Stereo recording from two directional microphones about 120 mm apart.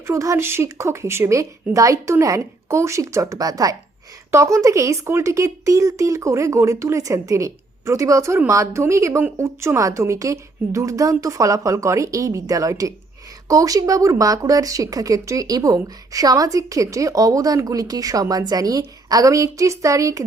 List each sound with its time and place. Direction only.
0.1 s speech: 25° right (ahead or behind)